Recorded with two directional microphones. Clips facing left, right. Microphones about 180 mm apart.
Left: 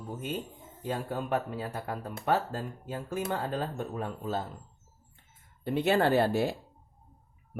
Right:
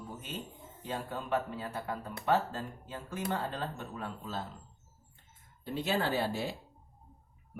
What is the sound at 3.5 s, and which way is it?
Speech, 45° left (ahead or behind).